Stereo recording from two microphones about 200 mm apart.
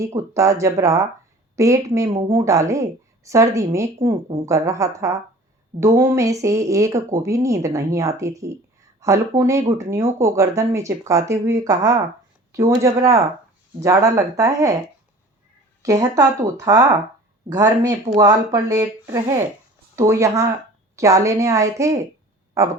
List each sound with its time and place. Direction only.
0.2 s speech: 15° right (ahead or behind)
15.8 s speech: 15° right (ahead or behind)